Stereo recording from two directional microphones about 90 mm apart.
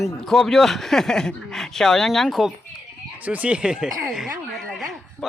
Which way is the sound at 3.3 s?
15° right (ahead or behind).